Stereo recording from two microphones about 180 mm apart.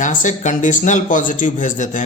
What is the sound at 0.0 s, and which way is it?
Speech, 45° left (ahead or behind).